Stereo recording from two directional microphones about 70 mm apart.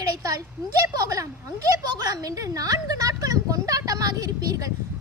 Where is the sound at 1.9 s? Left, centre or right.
Right.